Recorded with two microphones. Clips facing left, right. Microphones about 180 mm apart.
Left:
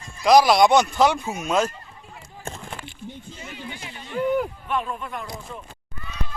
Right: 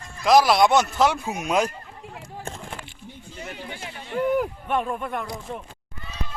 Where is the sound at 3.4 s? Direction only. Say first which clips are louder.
Right 2 dB; 50° right (ahead or behind).